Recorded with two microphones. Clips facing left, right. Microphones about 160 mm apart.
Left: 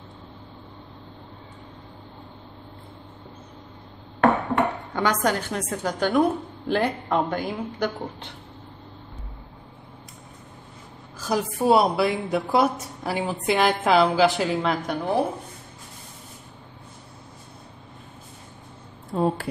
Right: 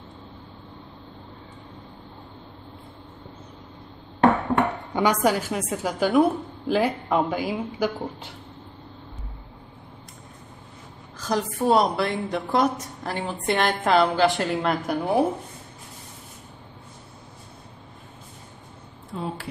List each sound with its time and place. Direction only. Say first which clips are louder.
4.9 s a woman's voice: right 3 dB; 10° right (ahead or behind)
11.1 s a woman's voice: left 1 dB; 5° left (ahead or behind)
19.1 s speech: left 9 dB; 40° left (ahead or behind)